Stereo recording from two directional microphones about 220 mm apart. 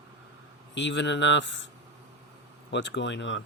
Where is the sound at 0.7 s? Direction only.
55° left (ahead or behind).